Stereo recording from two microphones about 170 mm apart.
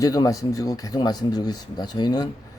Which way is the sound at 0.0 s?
20° left (ahead or behind).